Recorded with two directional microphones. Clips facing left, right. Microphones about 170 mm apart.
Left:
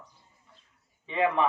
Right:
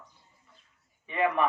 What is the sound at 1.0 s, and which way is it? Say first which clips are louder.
Speech: left 1 dB; 25° left (ahead or behind).